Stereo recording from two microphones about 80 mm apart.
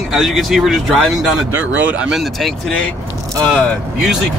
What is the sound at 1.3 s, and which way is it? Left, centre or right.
Speech, centre.